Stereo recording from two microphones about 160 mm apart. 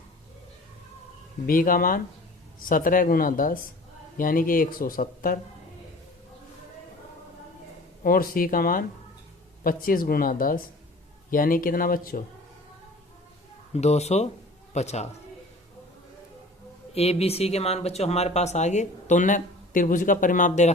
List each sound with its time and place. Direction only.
1.5 s speech: 60° left (ahead or behind)
8.0 s speech: 65° left (ahead or behind)
13.7 s a man's voice: 45° left (ahead or behind)
16.9 s speech: 40° left (ahead or behind)